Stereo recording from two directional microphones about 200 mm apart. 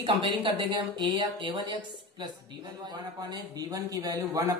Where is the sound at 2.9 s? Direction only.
20° right (ahead or behind).